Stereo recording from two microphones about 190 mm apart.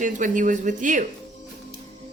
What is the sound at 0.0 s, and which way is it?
Speech, 45° right (ahead or behind).